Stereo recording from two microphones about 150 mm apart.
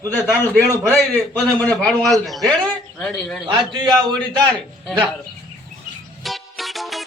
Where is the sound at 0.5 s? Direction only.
20° right (ahead or behind).